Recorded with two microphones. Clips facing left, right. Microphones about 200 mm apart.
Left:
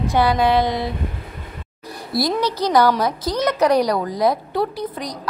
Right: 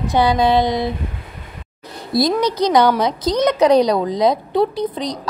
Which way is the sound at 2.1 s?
20° right (ahead or behind).